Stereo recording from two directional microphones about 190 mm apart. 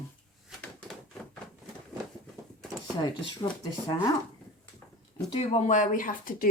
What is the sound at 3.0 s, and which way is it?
Speech, 25° left (ahead or behind).